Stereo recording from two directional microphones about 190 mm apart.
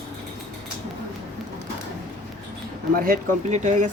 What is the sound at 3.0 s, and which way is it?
Speech, 45° right (ahead or behind).